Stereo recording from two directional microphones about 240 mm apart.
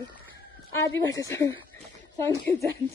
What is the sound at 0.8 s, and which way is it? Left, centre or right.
Speech, centre.